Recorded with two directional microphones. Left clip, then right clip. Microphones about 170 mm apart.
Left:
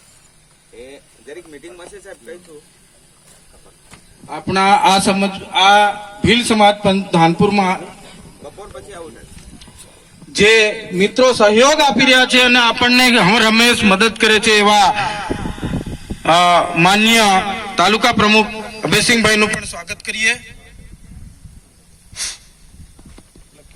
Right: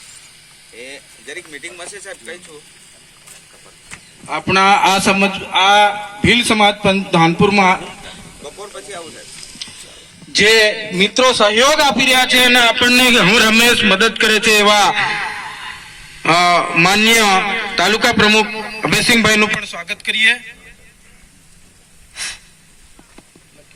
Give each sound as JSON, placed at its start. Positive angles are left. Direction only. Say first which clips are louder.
{"t": 0.9, "sound": "a man's voice", "louder": "right 6 dB", "side_deg": 50}
{"t": 4.3, "sound": "a man's voice", "louder": "right 1 dB", "side_deg": -15}
{"t": 8.0, "sound": "a sound", "louder": "right 6 dB", "side_deg": 0}
{"t": 8.4, "sound": "speech", "louder": "right 3 dB", "side_deg": 60}
{"t": 10.3, "sound": "a man's voice", "louder": "even", "side_deg": 60}